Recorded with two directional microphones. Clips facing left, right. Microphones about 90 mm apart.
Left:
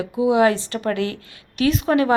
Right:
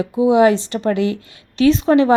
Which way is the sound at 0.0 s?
25° right (ahead or behind).